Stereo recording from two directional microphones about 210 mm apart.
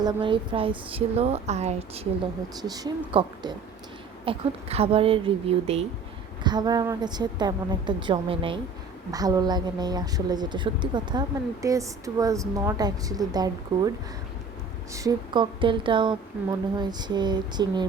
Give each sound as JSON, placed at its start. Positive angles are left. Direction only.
{"t": 0.0, "sound": "a woman's voice", "side_deg": -20}
{"t": 2.6, "sound": "a woman's voice", "side_deg": -20}
{"t": 14.9, "sound": "a woman's voice", "side_deg": -20}